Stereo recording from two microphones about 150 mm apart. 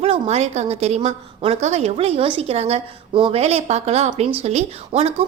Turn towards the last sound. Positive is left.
turn(degrees=-45)  # may be behind; listen again after turning